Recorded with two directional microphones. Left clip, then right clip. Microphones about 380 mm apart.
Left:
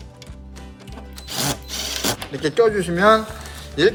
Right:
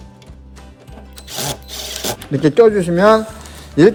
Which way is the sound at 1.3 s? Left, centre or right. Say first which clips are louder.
Even; centre.